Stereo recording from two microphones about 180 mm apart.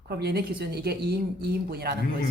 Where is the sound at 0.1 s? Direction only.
65° right (ahead or behind).